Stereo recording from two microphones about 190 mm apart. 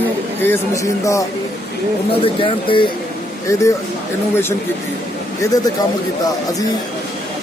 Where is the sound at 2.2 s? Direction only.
25° left (ahead or behind).